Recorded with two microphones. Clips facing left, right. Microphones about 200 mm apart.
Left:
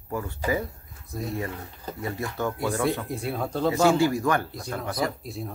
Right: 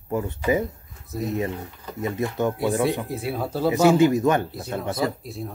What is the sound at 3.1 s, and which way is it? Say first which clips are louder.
Speech: right 2 dB; 5° right (ahead or behind).